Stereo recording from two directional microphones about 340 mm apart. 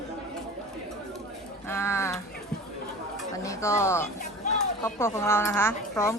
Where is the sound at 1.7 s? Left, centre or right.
Centre.